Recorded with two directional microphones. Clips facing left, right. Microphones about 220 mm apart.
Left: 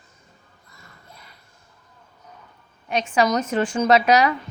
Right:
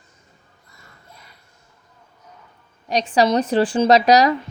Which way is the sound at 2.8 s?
35° right (ahead or behind).